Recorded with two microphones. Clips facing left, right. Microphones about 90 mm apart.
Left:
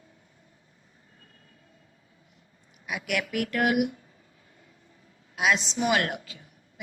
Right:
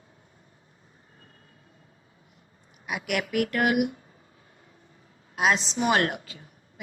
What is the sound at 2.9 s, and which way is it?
Speech, 45° right (ahead or behind).